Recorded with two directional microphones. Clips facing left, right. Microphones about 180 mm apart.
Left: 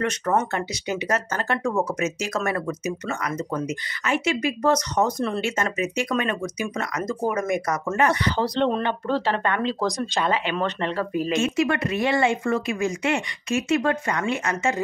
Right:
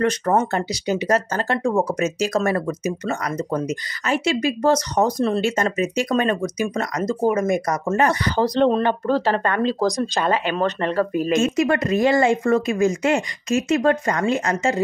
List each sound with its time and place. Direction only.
0.0 s speech: 35° right (ahead or behind)